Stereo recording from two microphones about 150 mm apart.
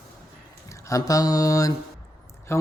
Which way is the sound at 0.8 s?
25° left (ahead or behind).